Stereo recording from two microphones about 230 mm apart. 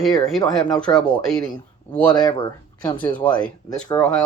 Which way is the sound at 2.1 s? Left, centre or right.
Centre.